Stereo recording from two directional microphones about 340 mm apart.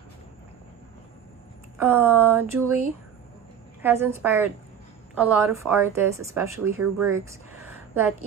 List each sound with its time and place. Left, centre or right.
1.8 s a woman's voice: centre
3.8 s a woman's voice: centre